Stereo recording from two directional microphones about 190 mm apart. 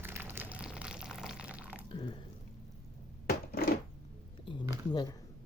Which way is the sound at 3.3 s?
50° left (ahead or behind).